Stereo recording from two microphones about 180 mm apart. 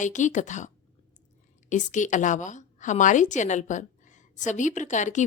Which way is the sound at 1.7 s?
45° left (ahead or behind).